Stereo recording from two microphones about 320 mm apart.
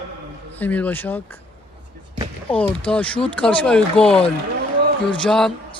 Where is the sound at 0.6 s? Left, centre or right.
Centre.